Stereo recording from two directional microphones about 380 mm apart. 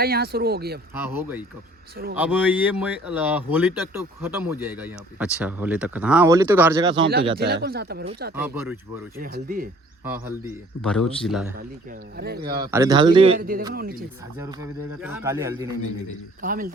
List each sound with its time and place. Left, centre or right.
0.0 s speech: right
0.9 s speech: centre
7.3 s speech: right
8.4 s speech: centre
9.1 s speech: right
10.0 s speech: centre
11.5 s speech: right
12.6 s speech: centre
13.7 s speech: right
15.0 s speech: centre
16.4 s speech: right